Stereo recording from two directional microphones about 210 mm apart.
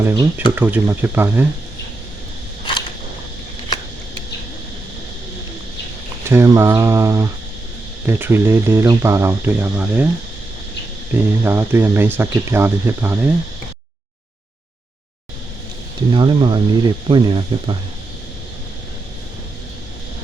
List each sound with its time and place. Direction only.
0.0 s speech: 15° right (ahead or behind)
6.2 s speech: 15° right (ahead or behind)
11.1 s speech: 10° right (ahead or behind)
16.1 s speech: 20° right (ahead or behind)